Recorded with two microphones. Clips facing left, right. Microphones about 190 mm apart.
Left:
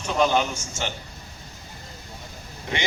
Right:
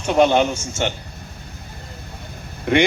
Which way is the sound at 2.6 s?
55° right (ahead or behind).